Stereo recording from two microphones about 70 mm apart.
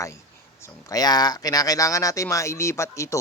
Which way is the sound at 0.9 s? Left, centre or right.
Left.